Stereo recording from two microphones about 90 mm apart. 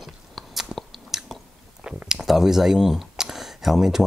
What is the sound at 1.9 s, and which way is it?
Speech, 10° right (ahead or behind).